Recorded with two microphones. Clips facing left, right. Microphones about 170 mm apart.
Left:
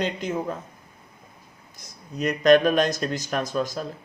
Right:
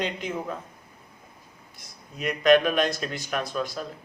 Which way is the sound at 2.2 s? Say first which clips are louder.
Left 2 dB; 40° left (ahead or behind).